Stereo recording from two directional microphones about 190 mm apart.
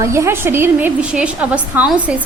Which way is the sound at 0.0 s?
15° right (ahead or behind).